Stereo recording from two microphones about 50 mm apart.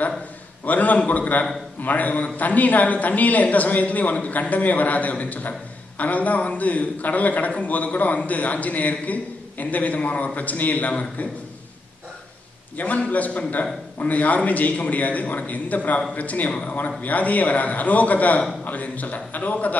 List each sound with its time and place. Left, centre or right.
0.7 s a man's voice: left
12.7 s a man's voice: left